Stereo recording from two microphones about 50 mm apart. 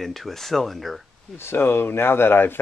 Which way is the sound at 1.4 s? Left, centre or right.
Left.